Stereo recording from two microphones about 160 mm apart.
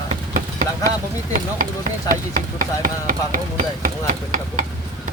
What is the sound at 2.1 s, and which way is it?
Speech, 55° right (ahead or behind).